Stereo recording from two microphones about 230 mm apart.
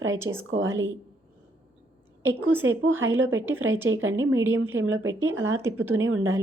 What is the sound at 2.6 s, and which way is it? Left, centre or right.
Speech, right.